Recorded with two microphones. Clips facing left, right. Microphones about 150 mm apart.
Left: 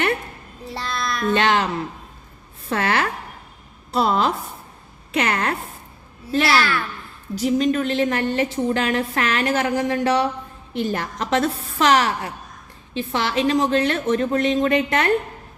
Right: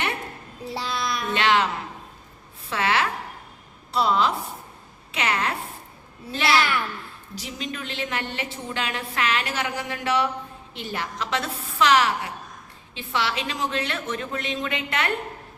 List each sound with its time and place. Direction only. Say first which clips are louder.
0.7 s child singing: left 1 dB; 10° right (ahead or behind)
1.3 s a woman's voice: left 3 dB; 35° left (ahead or behind)
2.6 s a woman's voice: left 2 dB; 50° left (ahead or behind)
6.5 s a woman's voice: right 2 dB; 20° right (ahead or behind)
7.3 s a woman's voice: left 15 dB; 45° left (ahead or behind)